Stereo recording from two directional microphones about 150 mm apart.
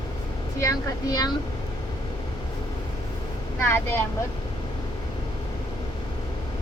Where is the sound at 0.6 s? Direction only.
25° left (ahead or behind).